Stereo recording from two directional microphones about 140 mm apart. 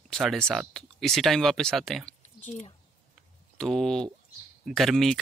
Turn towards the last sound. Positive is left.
turn(degrees=0)  # may be behind; listen again after turning